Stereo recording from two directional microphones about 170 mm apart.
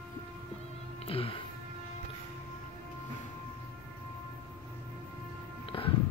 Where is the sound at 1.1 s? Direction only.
35° left (ahead or behind).